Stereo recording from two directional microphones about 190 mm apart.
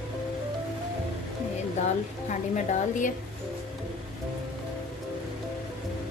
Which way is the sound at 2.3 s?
40° left (ahead or behind).